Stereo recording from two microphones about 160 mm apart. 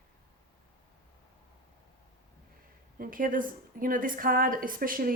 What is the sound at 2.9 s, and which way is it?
A woman's voice, 60° right (ahead or behind).